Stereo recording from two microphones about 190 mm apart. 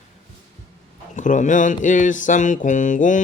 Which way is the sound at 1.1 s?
40° left (ahead or behind).